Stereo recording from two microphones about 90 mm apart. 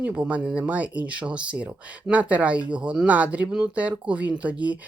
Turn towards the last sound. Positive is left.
turn(degrees=-15)  # may be behind; listen again after turning